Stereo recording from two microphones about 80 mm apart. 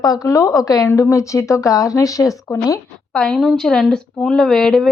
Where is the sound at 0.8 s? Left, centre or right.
Left.